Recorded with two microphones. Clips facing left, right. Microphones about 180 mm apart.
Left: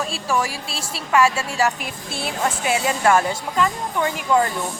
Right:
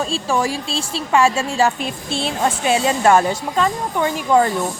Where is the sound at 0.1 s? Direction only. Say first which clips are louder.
Right 3 dB; 25° right (ahead or behind).